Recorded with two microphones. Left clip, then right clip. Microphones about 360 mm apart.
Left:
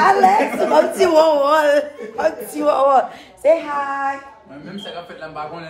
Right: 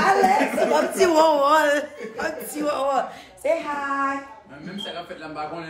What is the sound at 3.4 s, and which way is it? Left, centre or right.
Speech, left.